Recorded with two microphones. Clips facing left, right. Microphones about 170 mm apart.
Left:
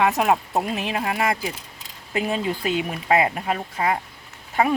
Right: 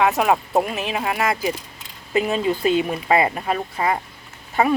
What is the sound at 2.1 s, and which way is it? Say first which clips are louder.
Speech: right 4 dB; 15° left (ahead or behind).